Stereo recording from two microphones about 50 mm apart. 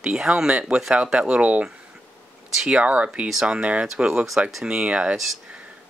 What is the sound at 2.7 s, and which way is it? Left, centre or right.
Speech, right.